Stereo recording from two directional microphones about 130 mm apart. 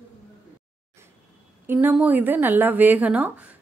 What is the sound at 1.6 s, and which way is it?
A woman's voice, 15° right (ahead or behind).